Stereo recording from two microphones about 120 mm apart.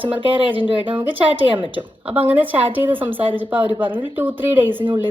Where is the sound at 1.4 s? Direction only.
45° right (ahead or behind).